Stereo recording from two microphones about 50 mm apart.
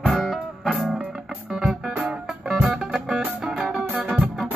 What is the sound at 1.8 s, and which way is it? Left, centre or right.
Music, right.